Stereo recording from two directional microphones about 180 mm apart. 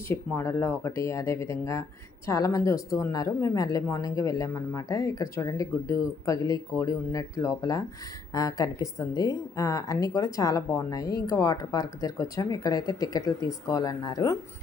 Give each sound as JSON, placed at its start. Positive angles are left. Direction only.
{"t": 0.1, "sound": "a woman's voice", "side_deg": 15}